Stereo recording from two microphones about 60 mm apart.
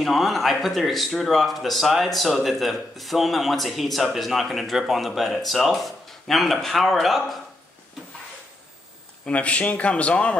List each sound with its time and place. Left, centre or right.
0.0 s speech: centre
9.2 s a man's voice: left